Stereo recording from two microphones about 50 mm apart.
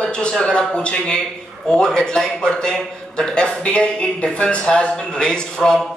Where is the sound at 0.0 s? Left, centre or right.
Centre.